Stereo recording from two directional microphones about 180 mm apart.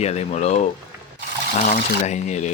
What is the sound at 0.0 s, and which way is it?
Speech, 35° left (ahead or behind).